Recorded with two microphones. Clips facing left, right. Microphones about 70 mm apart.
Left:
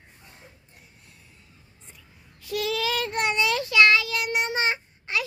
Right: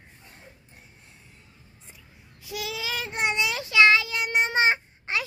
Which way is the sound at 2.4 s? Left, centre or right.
Centre.